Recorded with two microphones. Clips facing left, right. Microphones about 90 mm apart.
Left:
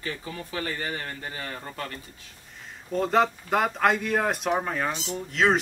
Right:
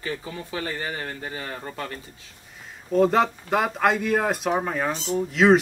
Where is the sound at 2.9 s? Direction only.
Centre (ahead or behind).